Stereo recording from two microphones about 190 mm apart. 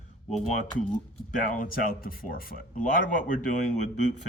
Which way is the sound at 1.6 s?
50° left (ahead or behind).